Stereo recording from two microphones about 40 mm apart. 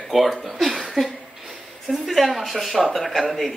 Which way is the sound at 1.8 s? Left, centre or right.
Centre.